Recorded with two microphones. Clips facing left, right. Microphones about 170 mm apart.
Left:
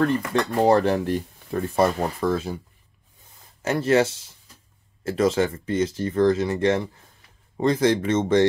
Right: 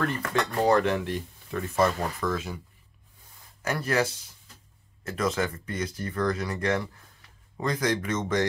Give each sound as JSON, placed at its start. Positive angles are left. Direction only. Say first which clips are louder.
{"t": 0.0, "sound": "speech", "louder": "left 6 dB", "side_deg": 30}
{"t": 3.6, "sound": "speech", "louder": "left 7 dB", "side_deg": 25}